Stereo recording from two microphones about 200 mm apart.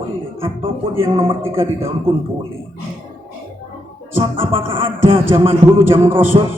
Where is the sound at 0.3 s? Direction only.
25° right (ahead or behind).